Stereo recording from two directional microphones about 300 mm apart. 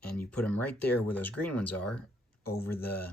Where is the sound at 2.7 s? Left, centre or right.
Left.